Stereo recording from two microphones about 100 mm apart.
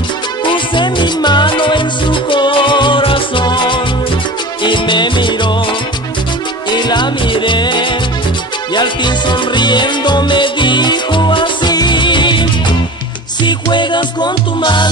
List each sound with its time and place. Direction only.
0.5 s music: 55° left (ahead or behind)